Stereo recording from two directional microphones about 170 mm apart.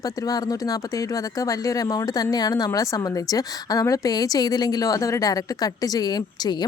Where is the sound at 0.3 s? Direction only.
20° left (ahead or behind).